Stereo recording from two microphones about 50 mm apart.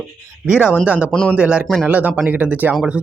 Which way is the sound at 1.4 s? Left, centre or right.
Right.